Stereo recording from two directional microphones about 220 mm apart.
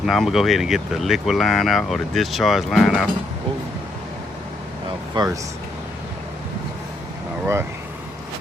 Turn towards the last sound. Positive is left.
turn(degrees=-10)  # may be behind; listen again after turning